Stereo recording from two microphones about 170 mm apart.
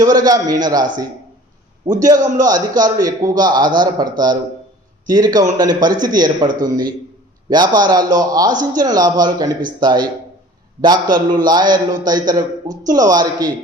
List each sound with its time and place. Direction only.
0.0 s a man's voice: 20° right (ahead or behind)